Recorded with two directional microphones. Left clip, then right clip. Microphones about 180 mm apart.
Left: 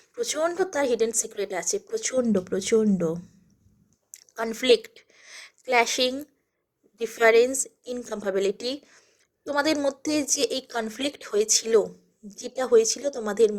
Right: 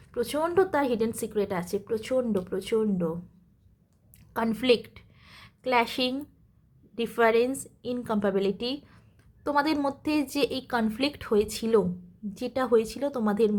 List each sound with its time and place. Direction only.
0.2 s a woman's voice: 20° left (ahead or behind)
4.1 s a sound: 20° left (ahead or behind)
7.0 s speech: 15° left (ahead or behind)